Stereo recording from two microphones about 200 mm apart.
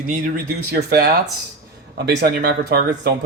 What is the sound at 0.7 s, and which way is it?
Speech, 55° right (ahead or behind).